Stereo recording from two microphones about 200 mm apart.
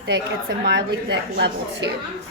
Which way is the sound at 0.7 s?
60° right (ahead or behind).